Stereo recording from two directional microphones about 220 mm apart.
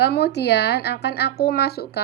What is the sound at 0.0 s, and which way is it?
Speech, 50° left (ahead or behind).